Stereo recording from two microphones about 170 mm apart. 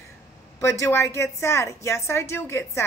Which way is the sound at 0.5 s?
15° left (ahead or behind).